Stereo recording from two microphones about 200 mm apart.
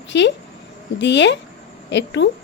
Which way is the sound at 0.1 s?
60° left (ahead or behind).